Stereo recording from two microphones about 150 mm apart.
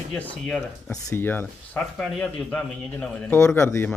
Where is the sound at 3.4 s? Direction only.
15° left (ahead or behind).